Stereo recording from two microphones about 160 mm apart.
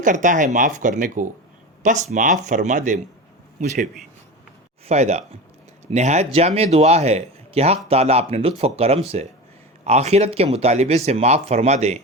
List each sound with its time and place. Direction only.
0.0 s speech: 50° right (ahead or behind)
4.9 s speech: 45° right (ahead or behind)